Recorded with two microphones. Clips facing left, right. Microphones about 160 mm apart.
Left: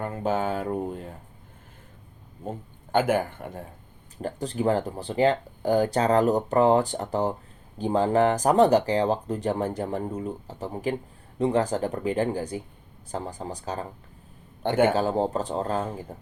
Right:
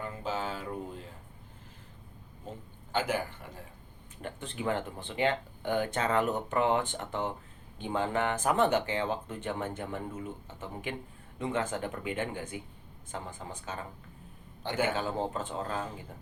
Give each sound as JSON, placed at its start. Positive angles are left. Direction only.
{"t": 0.0, "sound": "speech", "side_deg": 55}
{"t": 2.5, "sound": "a man's voice", "side_deg": 55}
{"t": 4.2, "sound": "speech", "side_deg": 35}
{"t": 14.6, "sound": "a man's voice", "side_deg": 55}
{"t": 14.9, "sound": "speech", "side_deg": 40}